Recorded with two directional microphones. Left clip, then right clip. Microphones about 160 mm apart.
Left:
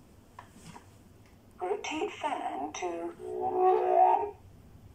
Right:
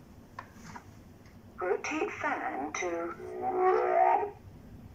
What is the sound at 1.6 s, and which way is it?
Speech, 15° left (ahead or behind).